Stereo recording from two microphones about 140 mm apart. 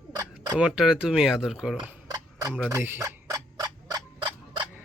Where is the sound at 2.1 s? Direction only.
25° right (ahead or behind).